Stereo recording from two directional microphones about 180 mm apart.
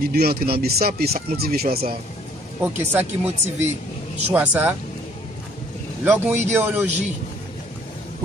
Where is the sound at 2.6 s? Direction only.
10° right (ahead or behind).